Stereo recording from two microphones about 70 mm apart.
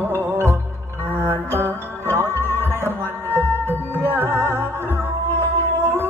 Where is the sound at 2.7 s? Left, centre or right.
Right.